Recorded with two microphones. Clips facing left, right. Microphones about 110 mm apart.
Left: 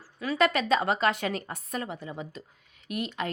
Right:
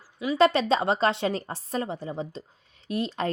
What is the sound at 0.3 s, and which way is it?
Speech, 30° right (ahead or behind).